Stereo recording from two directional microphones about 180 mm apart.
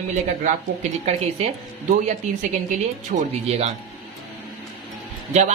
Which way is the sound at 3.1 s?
35° right (ahead or behind).